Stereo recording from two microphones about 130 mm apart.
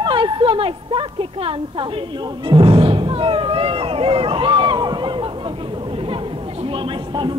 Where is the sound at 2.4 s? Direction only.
40° right (ahead or behind).